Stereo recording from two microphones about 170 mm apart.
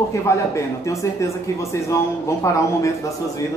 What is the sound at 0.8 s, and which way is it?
Speech, 15° left (ahead or behind).